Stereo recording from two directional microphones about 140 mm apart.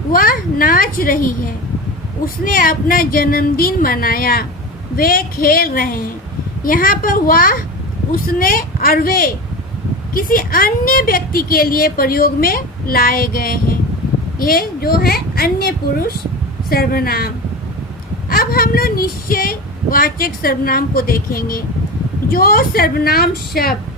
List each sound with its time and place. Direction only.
0.1 s a child's voice: 90° left
2.2 s a woman's voice: 90° left